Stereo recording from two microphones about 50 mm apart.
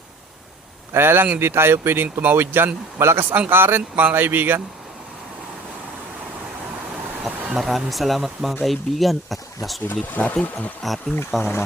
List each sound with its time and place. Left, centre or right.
0.9 s speech: right
3.0 s speech: right
3.5 s speech: right
7.3 s speech: centre
9.8 s speech: left
10.8 s speech: centre